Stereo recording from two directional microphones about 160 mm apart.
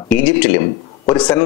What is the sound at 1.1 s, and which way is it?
Speech, 5° left (ahead or behind).